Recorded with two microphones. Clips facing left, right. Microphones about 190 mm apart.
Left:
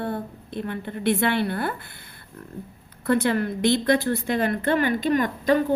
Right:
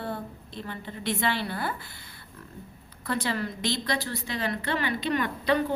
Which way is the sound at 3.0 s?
55° left (ahead or behind).